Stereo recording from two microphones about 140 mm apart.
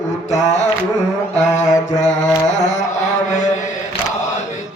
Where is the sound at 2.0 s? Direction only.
55° left (ahead or behind).